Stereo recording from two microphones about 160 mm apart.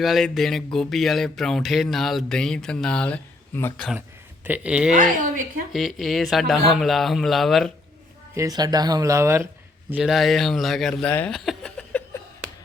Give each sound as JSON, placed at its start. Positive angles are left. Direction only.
{"t": 0.0, "sound": "speech", "side_deg": 0}
{"t": 4.4, "sound": "speech", "side_deg": -10}
{"t": 5.2, "sound": "a woman's voice", "side_deg": -55}
{"t": 5.7, "sound": "speech", "side_deg": 0}
{"t": 8.4, "sound": "speech", "side_deg": -25}
{"t": 9.9, "sound": "speech", "side_deg": 0}